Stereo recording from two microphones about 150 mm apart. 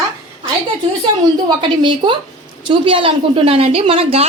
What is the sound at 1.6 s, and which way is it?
A woman's voice, 35° right (ahead or behind).